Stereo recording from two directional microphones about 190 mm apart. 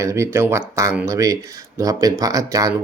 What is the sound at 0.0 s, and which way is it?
Speech, 15° right (ahead or behind).